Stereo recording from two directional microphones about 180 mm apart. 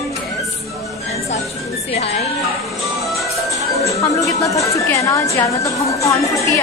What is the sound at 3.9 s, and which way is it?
A woman's voice, 15° left (ahead or behind).